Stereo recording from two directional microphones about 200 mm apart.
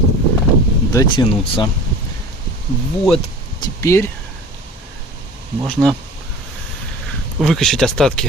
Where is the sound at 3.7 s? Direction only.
15° left (ahead or behind).